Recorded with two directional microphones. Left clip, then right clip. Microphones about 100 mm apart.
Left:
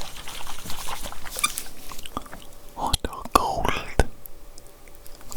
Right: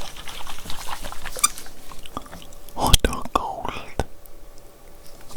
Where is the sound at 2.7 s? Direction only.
25° right (ahead or behind).